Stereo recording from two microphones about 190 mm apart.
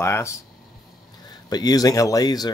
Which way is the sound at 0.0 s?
15° left (ahead or behind).